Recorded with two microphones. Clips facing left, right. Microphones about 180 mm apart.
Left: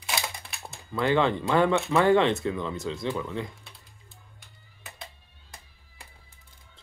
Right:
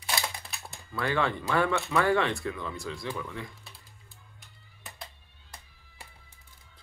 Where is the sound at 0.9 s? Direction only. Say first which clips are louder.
Left 5 dB; 20° left (ahead or behind).